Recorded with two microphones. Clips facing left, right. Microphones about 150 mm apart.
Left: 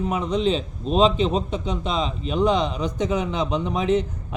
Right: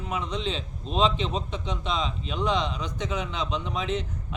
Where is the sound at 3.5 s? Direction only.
50° left (ahead or behind).